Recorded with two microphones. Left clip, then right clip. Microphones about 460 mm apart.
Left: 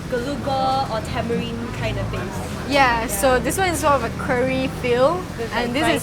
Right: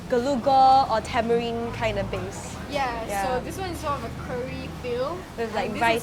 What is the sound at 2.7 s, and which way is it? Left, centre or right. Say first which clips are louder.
A woman's voice: left 9 dB; centre.